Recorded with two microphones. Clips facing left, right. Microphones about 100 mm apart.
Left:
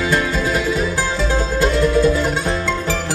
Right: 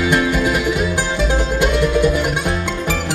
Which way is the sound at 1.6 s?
15° right (ahead or behind).